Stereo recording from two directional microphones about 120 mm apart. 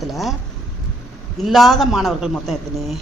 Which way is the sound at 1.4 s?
Centre (ahead or behind).